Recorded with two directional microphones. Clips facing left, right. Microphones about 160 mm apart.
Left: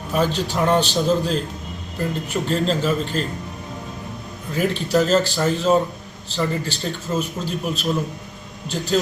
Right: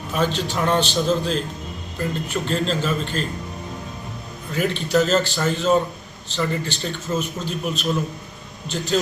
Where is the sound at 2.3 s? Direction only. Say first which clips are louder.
Left 3 dB; 15° left (ahead or behind).